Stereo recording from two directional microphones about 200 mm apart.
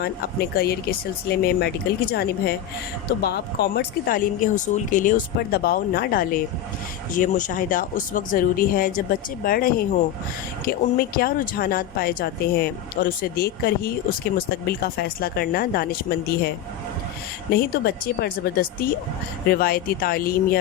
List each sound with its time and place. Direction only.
0.0 s a woman's voice: 50° left (ahead or behind)
17.5 s a woman's voice: 50° left (ahead or behind)